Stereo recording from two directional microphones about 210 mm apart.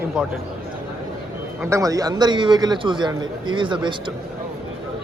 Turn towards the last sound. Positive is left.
turn(degrees=-20)  # may be behind; listen again after turning